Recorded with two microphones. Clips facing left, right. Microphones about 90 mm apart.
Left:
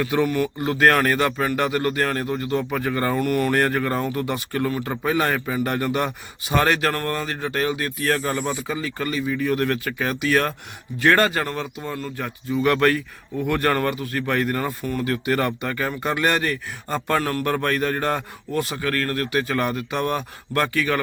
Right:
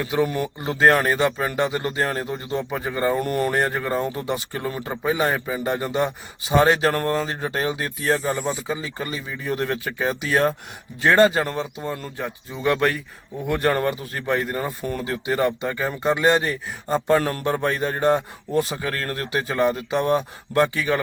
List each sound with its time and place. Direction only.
0.0 s speech: 15° right (ahead or behind)
0.3 s a man's voice: 30° right (ahead or behind)
3.2 s speech: 30° right (ahead or behind)
3.5 s a man's voice: 15° right (ahead or behind)
8.2 s speech: 5° right (ahead or behind)
8.4 s a man's voice: 20° right (ahead or behind)
12.2 s speech: 25° right (ahead or behind)
18.5 s a man's voice: 30° right (ahead or behind)